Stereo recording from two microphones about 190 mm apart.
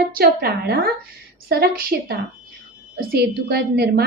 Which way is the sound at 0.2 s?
50° right (ahead or behind).